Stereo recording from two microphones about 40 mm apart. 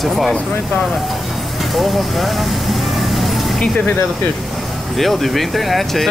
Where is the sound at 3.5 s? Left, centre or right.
Centre.